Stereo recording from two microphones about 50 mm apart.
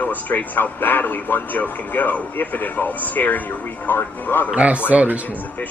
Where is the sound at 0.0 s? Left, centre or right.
Left.